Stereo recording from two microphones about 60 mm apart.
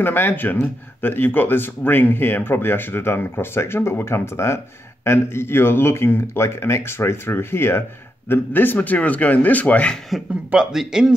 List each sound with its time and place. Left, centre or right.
0.0 s speech: left
10.5 s a man's voice: centre